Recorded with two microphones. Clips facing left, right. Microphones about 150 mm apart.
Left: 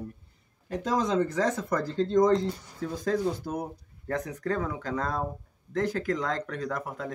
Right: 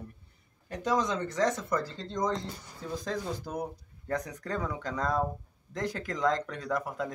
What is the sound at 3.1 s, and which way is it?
Speech, 5° left (ahead or behind).